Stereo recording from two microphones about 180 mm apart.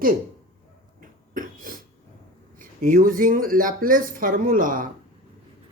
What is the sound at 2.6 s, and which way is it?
Speech, 50° right (ahead or behind).